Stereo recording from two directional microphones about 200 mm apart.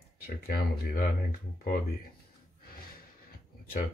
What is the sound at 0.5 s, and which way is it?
Speech, 45° left (ahead or behind).